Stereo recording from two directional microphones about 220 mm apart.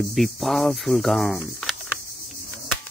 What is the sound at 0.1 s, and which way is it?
Cricket, centre (ahead or behind).